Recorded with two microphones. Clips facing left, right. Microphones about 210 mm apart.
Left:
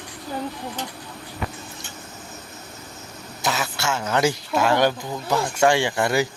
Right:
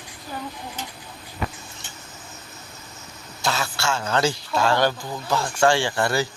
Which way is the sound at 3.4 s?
20° left (ahead or behind).